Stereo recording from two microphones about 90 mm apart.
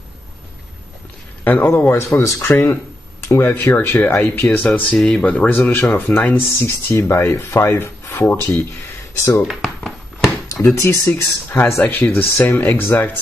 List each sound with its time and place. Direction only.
1.4 s a man's voice: 20° left (ahead or behind)
2.5 s speech: 20° left (ahead or behind)
3.3 s speech: 30° left (ahead or behind)
4.9 s speech: 5° left (ahead or behind)
5.2 s speech: 15° left (ahead or behind)
9.5 s a sound: centre (ahead or behind)
10.6 s speech: 30° left (ahead or behind)
12.6 s speech: 30° left (ahead or behind)